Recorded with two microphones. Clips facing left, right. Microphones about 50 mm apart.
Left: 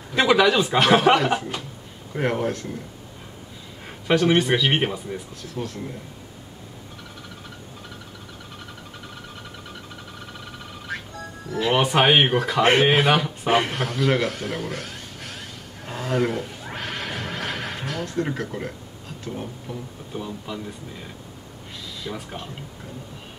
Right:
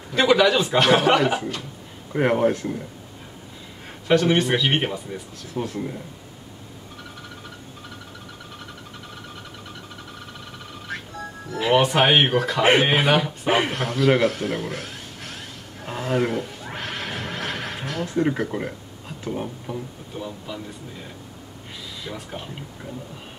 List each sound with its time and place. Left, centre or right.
0.1 s a man's voice: centre
2.1 s speech: centre
4.1 s a man's voice: centre
5.5 s speech: centre
10.9 s music: centre
19.2 s speech: centre
20.2 s a man's voice: centre